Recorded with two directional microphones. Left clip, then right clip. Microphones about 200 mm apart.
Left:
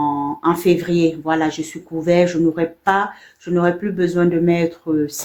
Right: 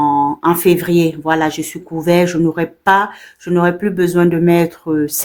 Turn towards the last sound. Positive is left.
turn(degrees=-40)  # may be behind; listen again after turning